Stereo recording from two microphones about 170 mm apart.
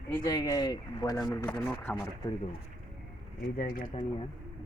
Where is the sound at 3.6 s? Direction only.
55° left (ahead or behind).